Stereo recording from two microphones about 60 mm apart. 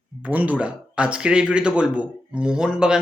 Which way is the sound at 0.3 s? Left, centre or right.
Right.